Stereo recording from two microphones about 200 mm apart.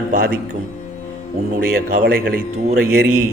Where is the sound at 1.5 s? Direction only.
45° right (ahead or behind).